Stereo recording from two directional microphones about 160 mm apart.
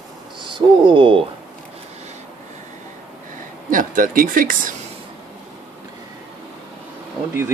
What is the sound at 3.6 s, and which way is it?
Speech, 55° right (ahead or behind).